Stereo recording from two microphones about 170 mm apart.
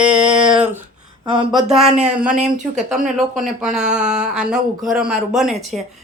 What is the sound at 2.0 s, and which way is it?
A woman's voice, 5° right (ahead or behind).